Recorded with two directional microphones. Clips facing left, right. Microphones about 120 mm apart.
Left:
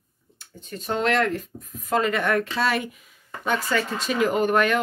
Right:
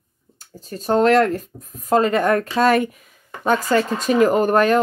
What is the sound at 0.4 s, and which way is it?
Speech, 40° right (ahead or behind).